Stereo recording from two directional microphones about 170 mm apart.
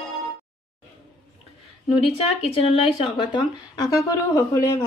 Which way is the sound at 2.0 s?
35° left (ahead or behind).